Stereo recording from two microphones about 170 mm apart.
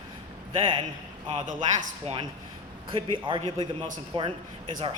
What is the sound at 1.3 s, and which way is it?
A man's voice, 45° right (ahead or behind).